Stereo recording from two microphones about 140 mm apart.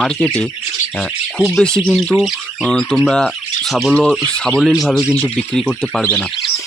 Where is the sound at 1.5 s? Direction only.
5° left (ahead or behind).